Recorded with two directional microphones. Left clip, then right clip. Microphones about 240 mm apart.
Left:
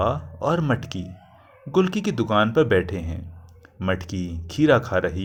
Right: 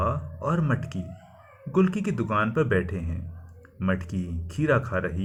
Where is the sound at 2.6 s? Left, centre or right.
Left.